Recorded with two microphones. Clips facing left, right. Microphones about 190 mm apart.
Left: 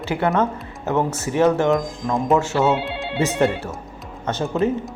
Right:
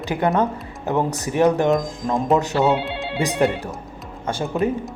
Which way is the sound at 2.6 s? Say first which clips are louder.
Even; centre (ahead or behind).